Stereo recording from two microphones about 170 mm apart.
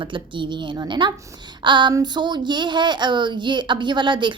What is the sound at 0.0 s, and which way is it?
Speech, 30° right (ahead or behind).